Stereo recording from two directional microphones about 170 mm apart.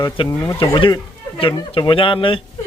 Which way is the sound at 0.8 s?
30° left (ahead or behind).